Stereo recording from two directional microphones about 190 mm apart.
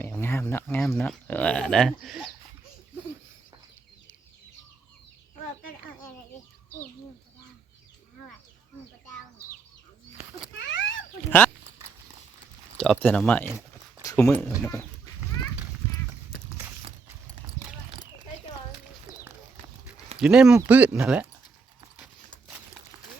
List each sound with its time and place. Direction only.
0.0 s speech: 10° left (ahead or behind)
10.2 s a sound: 30° right (ahead or behind)
10.6 s a sound: 70° left (ahead or behind)
11.3 s speech: 10° left (ahead or behind)
12.7 s speech: 5° left (ahead or behind)
20.1 s speech: 5° right (ahead or behind)
21.9 s horse: 5° right (ahead or behind)